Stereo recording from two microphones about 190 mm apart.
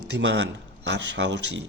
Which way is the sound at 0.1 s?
65° right (ahead or behind).